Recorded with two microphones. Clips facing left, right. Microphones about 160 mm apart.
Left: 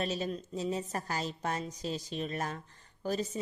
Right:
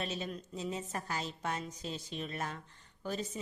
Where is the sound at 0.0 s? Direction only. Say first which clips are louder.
Left 5 dB; 40° left (ahead or behind).